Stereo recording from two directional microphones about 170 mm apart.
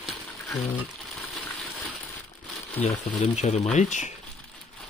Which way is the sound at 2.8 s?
40° left (ahead or behind).